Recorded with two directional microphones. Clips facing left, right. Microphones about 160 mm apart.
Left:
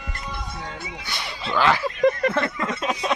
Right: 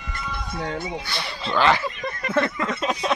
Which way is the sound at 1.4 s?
5° left (ahead or behind).